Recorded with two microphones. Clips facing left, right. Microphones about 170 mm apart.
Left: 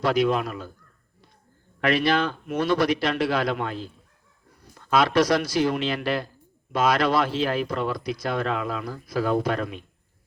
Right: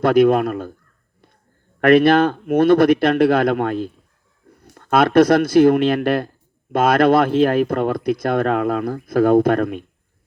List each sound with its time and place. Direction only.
0.0 s speech: 55° right (ahead or behind)
1.8 s speech: 55° right (ahead or behind)